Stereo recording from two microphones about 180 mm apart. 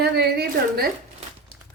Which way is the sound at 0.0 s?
60° right (ahead or behind).